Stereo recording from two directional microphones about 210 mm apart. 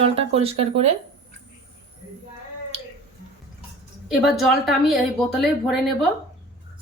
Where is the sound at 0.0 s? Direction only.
30° right (ahead or behind).